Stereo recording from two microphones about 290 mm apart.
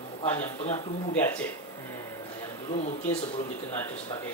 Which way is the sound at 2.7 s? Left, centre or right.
Left.